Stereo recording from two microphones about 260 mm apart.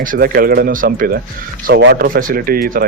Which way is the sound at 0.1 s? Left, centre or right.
Right.